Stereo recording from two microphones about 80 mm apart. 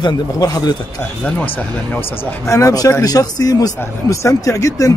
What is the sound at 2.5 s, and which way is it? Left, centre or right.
Speech, left.